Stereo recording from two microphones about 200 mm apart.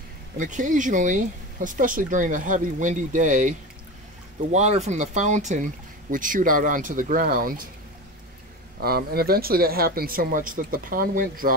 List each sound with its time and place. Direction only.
0.4 s speech: 40° right (ahead or behind)
8.8 s speech: 50° right (ahead or behind)